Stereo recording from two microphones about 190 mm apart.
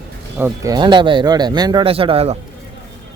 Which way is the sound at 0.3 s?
15° right (ahead or behind).